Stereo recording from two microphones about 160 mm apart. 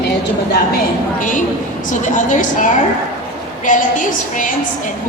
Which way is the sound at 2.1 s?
50° left (ahead or behind).